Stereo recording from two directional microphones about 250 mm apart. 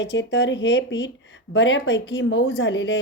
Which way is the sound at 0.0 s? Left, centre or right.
Left.